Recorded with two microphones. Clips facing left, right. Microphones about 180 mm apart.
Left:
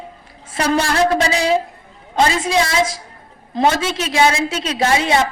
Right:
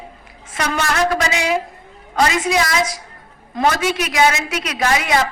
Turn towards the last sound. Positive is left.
turn(degrees=30)  # may be behind; listen again after turning